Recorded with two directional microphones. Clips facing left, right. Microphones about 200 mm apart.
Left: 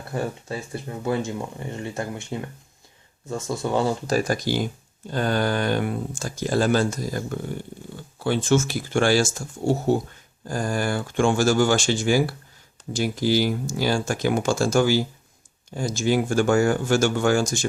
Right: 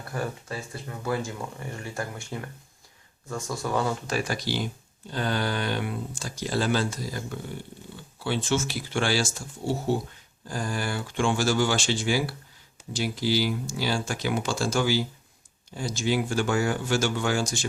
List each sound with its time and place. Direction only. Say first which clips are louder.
0.1 s speech: left 4 dB; 25° left (ahead or behind); by 17.7 s 45° left (ahead or behind)